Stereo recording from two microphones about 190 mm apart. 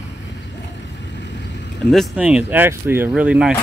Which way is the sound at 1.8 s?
Centre (ahead or behind).